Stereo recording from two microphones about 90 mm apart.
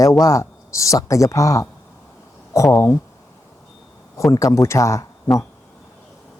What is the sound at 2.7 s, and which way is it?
Speech, 25° left (ahead or behind).